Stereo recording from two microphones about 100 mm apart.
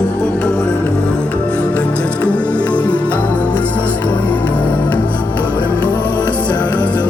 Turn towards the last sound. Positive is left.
turn(degrees=15)  # may be behind; listen again after turning